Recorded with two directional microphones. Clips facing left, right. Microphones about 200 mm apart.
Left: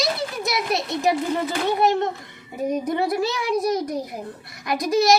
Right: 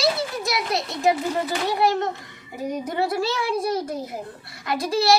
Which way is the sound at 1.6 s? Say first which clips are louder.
Left 3 dB; 20° left (ahead or behind).